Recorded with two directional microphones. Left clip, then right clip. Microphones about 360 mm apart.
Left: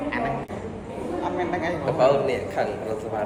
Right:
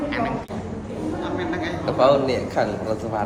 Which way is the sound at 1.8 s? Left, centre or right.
Centre.